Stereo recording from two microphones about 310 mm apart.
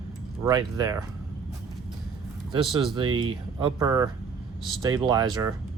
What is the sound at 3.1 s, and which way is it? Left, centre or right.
Speech, right.